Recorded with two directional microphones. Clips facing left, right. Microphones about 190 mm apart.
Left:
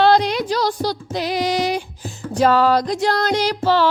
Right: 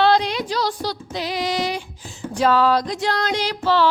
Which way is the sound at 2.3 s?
45° left (ahead or behind).